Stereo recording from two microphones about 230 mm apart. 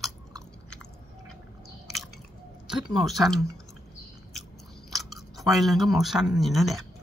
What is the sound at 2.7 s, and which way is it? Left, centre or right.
Speech, centre.